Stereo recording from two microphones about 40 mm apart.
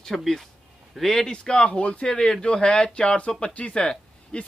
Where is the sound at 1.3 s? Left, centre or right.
Left.